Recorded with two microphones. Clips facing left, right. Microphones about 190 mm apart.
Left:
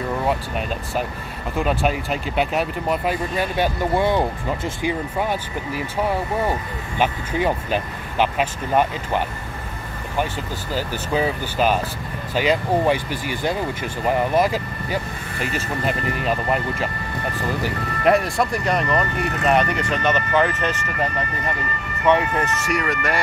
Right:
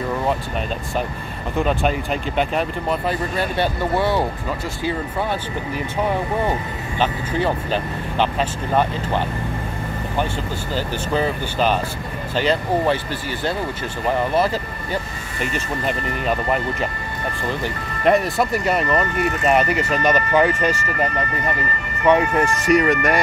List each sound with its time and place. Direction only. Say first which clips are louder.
1.6 s speech: right 1 dB; 5° left (ahead or behind)
7.0 s speech: even; 10° left (ahead or behind)
10.7 s speech: even; 10° left (ahead or behind)
17.6 s speech: even; centre (ahead or behind)
22.0 s speech: right 2 dB; 10° right (ahead or behind)
22.7 s speech: right 7 dB; 20° right (ahead or behind)